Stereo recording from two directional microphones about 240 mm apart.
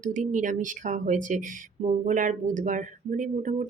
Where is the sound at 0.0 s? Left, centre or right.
Right.